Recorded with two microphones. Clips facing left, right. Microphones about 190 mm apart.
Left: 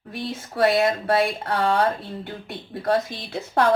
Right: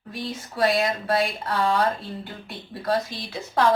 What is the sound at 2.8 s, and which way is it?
Speech, 55° left (ahead or behind).